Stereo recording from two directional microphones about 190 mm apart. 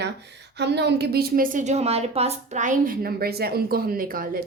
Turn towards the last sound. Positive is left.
turn(degrees=-50)  # may be behind; listen again after turning